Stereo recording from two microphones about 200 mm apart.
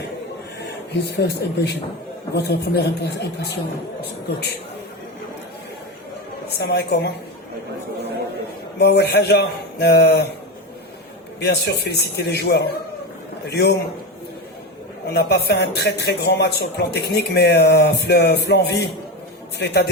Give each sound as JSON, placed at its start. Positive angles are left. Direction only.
{"t": 1.1, "sound": "speech", "side_deg": 55}
{"t": 6.6, "sound": "speech", "side_deg": 55}
{"t": 8.8, "sound": "speech", "side_deg": 55}
{"t": 11.3, "sound": "speech", "side_deg": 55}
{"t": 15.1, "sound": "speech", "side_deg": 55}